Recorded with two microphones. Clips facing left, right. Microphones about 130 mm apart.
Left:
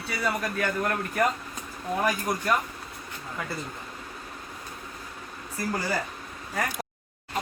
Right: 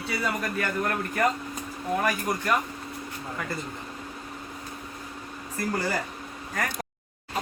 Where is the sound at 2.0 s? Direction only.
15° left (ahead or behind).